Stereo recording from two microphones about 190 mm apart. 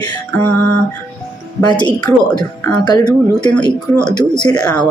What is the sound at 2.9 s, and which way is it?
Speech, 20° left (ahead or behind).